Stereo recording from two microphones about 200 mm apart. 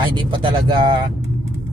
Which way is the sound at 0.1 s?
25° right (ahead or behind).